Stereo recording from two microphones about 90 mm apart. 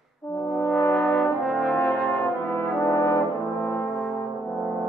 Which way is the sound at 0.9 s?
5° left (ahead or behind).